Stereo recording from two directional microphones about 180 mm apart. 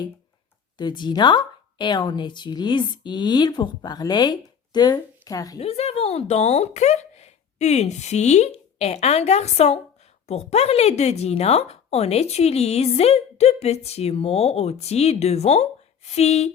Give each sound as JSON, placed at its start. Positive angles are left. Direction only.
{"t": 0.8, "sound": "speech", "side_deg": 25}
{"t": 5.5, "sound": "speech", "side_deg": 35}